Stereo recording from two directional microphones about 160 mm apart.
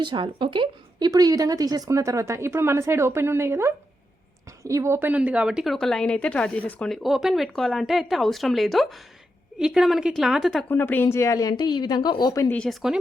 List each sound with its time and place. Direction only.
0.0 s a woman's voice: 30° right (ahead or behind); by 10.7 s centre (ahead or behind)
10.7 s a woman's voice: 15° left (ahead or behind)
12.5 s a woman's voice: centre (ahead or behind)